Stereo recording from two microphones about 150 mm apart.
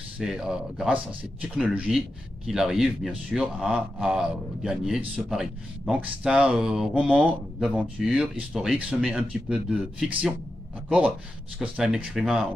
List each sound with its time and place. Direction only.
0.2 s speech: 5° right (ahead or behind)